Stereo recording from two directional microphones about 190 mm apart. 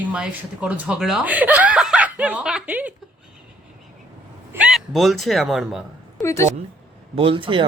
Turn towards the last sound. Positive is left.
turn(degrees=-25)  # may be behind; listen again after turning